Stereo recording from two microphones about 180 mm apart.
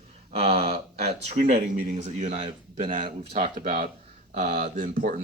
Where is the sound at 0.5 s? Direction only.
60° right (ahead or behind).